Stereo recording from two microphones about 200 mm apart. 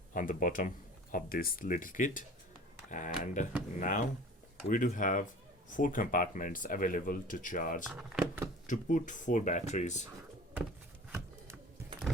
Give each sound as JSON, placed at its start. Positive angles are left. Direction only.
{"t": 0.1, "sound": "speech", "side_deg": 40}
{"t": 7.9, "sound": "speech", "side_deg": -5}
{"t": 8.6, "sound": "speech", "side_deg": 40}